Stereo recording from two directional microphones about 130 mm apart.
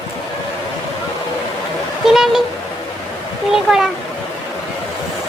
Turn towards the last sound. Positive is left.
turn(degrees=-5)  # may be behind; listen again after turning